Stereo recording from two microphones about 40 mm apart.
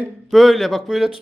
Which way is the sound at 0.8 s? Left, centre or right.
Centre.